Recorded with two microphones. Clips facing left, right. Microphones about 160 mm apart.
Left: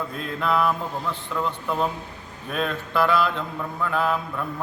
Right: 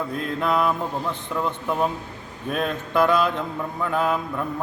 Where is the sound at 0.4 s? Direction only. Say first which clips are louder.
Even; 20° right (ahead or behind).